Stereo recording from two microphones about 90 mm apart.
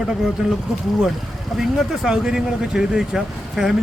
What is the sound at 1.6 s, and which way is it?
Speech, 5° right (ahead or behind).